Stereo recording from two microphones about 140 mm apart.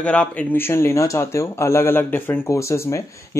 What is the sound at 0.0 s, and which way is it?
Speech, 10° left (ahead or behind).